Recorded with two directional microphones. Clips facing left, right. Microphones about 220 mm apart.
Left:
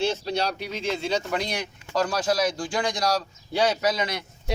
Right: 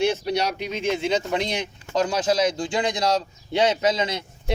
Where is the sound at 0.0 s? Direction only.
15° right (ahead or behind).